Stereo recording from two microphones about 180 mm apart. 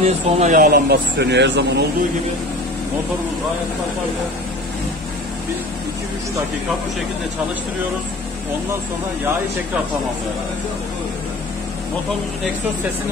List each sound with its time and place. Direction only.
0.0 s speech: 40° right (ahead or behind); by 1.9 s 75° right (ahead or behind)